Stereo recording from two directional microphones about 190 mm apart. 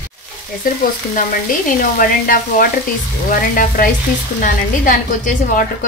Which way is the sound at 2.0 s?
50° left (ahead or behind).